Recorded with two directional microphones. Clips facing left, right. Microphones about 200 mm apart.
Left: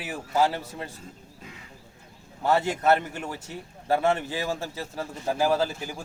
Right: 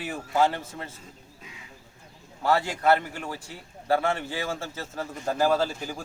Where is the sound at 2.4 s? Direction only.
20° left (ahead or behind).